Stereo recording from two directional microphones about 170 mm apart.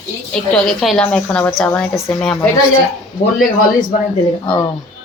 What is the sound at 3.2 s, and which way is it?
Speech, 60° left (ahead or behind).